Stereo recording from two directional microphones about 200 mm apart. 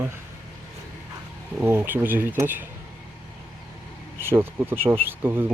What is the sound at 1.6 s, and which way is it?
Speech, 10° right (ahead or behind).